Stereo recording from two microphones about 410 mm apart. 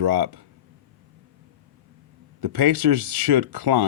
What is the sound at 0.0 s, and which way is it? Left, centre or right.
Speech, right.